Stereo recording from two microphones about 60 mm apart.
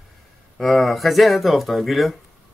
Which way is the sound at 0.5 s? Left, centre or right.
Centre.